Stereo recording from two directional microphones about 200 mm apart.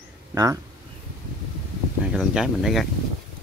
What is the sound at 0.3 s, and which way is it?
Speech, 15° right (ahead or behind).